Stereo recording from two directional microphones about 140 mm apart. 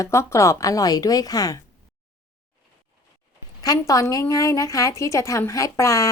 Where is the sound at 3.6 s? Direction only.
25° left (ahead or behind).